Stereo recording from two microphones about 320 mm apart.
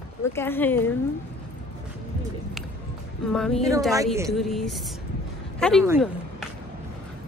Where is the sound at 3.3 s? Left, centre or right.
Centre.